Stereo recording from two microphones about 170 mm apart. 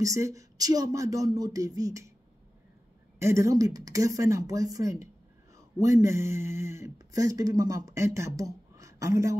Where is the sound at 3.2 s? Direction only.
15° right (ahead or behind).